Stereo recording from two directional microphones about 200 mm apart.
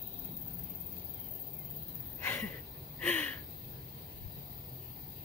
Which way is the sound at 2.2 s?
10° left (ahead or behind).